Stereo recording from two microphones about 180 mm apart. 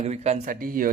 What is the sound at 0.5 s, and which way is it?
Speech, 50° right (ahead or behind).